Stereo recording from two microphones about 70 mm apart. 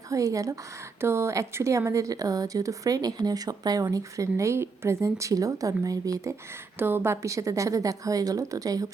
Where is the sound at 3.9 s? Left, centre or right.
Right.